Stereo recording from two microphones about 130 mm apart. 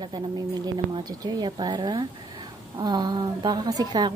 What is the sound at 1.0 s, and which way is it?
A woman's voice, 30° right (ahead or behind).